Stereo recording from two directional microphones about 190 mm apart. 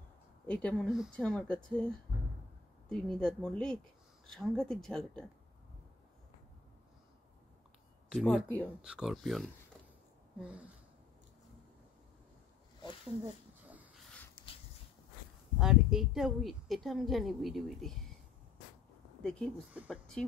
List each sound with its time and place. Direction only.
0.5 s a woman's voice: 5° left (ahead or behind)
2.9 s a woman's voice: 5° left (ahead or behind)
8.1 s a woman's voice: centre (ahead or behind)
8.5 s speech: 10° left (ahead or behind)
8.8 s a woman's voice: 5° right (ahead or behind)
13.2 s a sound: 5° right (ahead or behind)
15.6 s a woman's voice: 5° right (ahead or behind)
19.2 s a woman's voice: 5° left (ahead or behind)